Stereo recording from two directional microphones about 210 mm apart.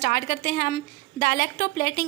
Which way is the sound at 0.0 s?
40° left (ahead or behind).